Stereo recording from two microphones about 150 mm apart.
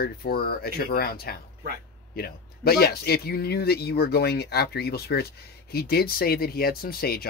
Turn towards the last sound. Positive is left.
turn(degrees=90)